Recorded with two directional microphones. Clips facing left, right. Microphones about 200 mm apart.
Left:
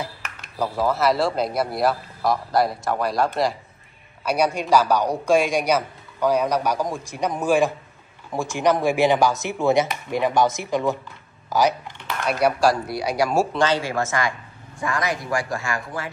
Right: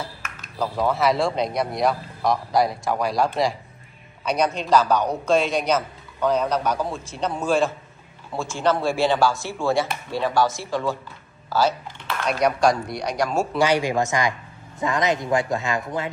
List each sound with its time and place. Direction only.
0.6 s a man's voice: centre (ahead or behind); by 11.7 s 15° left (ahead or behind)
12.3 s a man's voice: 5° left (ahead or behind)
13.5 s a man's voice: 10° right (ahead or behind)